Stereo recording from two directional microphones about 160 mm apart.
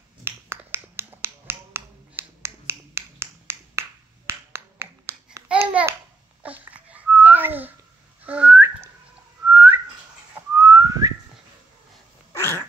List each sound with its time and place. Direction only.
0.2 s finger snapping: 15° right (ahead or behind)
4.3 s babbling: 15° right (ahead or behind)
8.3 s whistling: 10° right (ahead or behind)
12.4 s dog: 15° left (ahead or behind)